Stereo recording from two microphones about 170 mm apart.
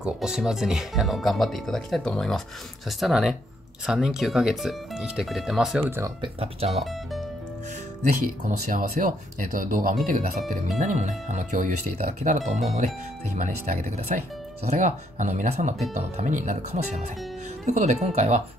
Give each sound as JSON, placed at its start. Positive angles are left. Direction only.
{"t": 0.0, "sound": "speech", "side_deg": -5}
{"t": 5.8, "sound": "speech", "side_deg": -15}
{"t": 6.2, "sound": "speech", "side_deg": -35}
{"t": 6.8, "sound": "speech", "side_deg": 0}
{"t": 8.1, "sound": "speech", "side_deg": -55}